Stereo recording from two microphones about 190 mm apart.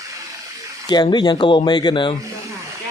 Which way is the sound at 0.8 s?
25° left (ahead or behind).